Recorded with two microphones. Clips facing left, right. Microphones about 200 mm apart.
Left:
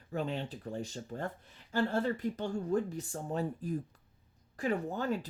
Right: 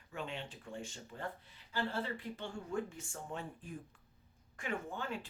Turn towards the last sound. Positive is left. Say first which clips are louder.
# left 8 dB
turn(degrees=40)  # may be behind; listen again after turning